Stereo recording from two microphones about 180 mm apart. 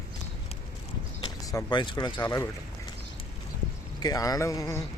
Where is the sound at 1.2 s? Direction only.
25° left (ahead or behind).